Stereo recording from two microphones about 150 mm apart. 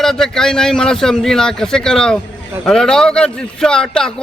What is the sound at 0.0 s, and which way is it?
A man's voice, 5° left (ahead or behind).